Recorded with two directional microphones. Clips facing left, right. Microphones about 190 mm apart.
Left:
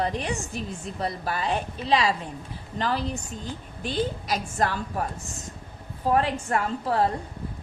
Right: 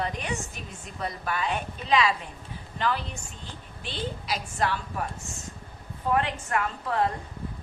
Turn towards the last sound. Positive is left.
turn(degrees=35)  # may be behind; listen again after turning